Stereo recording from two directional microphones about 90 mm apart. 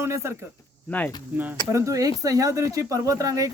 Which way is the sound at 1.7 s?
35° right (ahead or behind).